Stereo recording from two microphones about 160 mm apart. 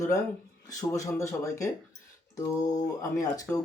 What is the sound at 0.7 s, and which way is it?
Speech, 20° left (ahead or behind).